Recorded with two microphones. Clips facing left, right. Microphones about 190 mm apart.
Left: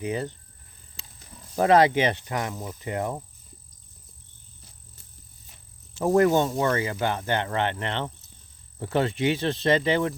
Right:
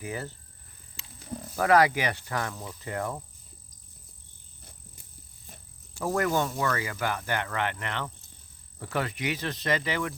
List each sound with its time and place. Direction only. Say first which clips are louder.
0.0 s speech: left 6 dB; 20° left (ahead or behind)
1.5 s speech: left 4 dB; 25° left (ahead or behind)
5.9 s speech: left 7 dB; 25° left (ahead or behind)